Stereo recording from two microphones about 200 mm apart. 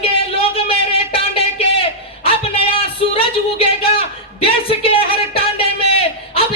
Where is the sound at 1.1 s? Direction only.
30° left (ahead or behind).